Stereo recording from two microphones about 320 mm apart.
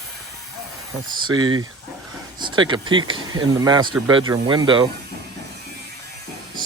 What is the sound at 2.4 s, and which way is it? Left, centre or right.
Speech, centre.